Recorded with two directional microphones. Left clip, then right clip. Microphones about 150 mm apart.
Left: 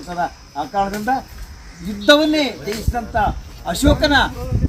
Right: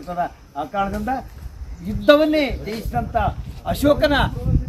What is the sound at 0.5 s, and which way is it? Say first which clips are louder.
A man's voice: left 3 dB; 5° left (ahead or behind).